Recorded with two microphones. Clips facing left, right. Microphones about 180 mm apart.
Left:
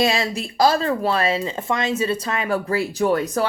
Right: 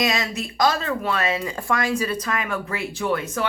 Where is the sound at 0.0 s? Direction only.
30° left (ahead or behind).